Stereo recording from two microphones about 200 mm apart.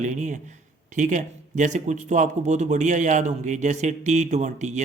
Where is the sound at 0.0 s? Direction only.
35° right (ahead or behind).